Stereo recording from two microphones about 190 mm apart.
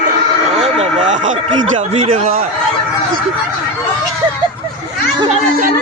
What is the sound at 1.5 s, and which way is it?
Speech, 25° right (ahead or behind).